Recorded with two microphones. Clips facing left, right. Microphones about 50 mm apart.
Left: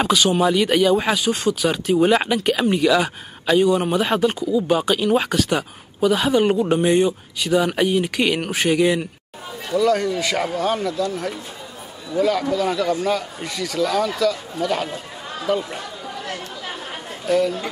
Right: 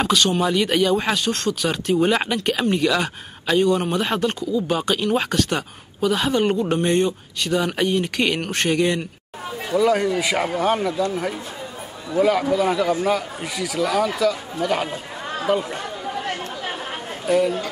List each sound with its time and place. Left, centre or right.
0.0 s speech: centre
9.7 s a man's voice: centre
15.3 s chatter: centre
17.3 s a man's voice: centre